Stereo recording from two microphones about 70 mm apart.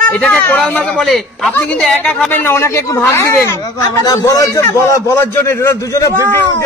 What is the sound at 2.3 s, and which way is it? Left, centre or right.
Speech, left.